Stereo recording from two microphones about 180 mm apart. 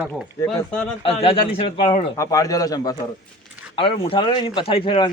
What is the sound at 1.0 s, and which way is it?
Speech, 35° left (ahead or behind).